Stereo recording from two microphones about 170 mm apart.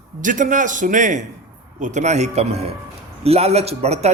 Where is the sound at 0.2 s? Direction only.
50° right (ahead or behind).